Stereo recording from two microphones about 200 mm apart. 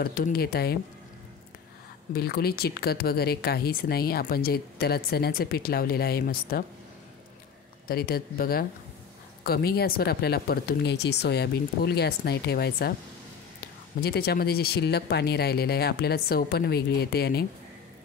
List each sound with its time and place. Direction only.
0.0 s speech: 45° left (ahead or behind)
2.1 s speech: 50° left (ahead or behind)
7.9 s speech: 50° left (ahead or behind)
14.0 s speech: 50° left (ahead or behind)